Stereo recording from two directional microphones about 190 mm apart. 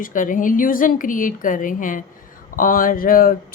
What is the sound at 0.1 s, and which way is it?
Speech, 45° left (ahead or behind).